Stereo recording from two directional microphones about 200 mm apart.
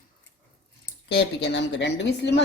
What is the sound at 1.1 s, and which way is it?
A woman's voice, 60° left (ahead or behind).